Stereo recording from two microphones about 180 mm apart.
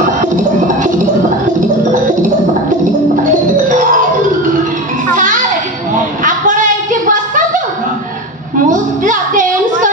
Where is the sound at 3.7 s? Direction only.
45° right (ahead or behind).